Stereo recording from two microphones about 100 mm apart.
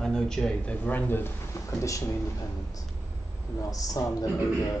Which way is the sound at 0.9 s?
20° left (ahead or behind).